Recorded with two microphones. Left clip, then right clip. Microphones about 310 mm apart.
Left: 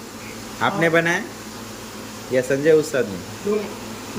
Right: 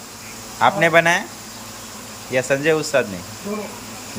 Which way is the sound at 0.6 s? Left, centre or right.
Centre.